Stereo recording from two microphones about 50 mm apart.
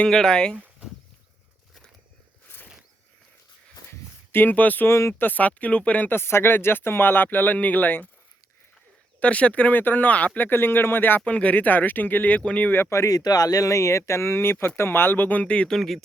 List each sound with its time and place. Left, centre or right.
0.1 s speech: centre
4.3 s speech: left
4.9 s speech: left
5.2 s speech: left
6.1 s speech: left
9.2 s speech: left
11.3 s speech: left
13.7 s speech: left
15.4 s speech: left
15.7 s speech: centre